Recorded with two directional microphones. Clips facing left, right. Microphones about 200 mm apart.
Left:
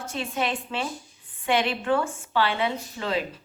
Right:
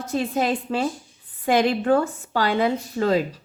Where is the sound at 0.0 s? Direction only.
40° right (ahead or behind).